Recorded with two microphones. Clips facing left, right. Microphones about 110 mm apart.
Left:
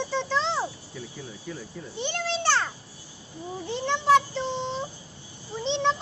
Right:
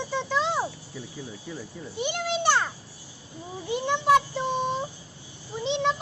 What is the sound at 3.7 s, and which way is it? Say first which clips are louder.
A child's voice: even; 15° right (ahead or behind).